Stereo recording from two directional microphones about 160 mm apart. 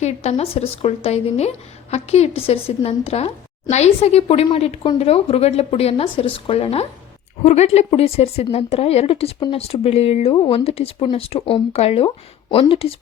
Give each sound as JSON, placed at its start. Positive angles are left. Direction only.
{"t": 0.0, "sound": "a woman's voice", "side_deg": 45}